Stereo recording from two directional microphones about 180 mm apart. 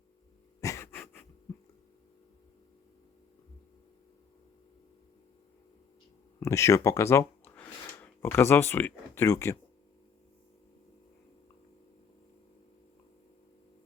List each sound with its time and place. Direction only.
0.6 s pant: 15° left (ahead or behind)
6.4 s speech: 15° left (ahead or behind)